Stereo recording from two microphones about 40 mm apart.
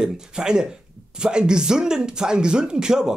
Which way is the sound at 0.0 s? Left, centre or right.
Centre.